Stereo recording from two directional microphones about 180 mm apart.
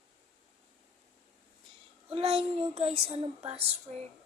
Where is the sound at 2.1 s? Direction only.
35° right (ahead or behind).